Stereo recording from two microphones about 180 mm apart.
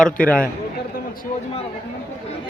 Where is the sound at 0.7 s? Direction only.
55° left (ahead or behind).